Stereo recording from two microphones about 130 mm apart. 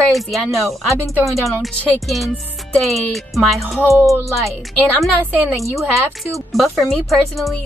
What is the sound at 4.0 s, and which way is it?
Speech, 20° right (ahead or behind).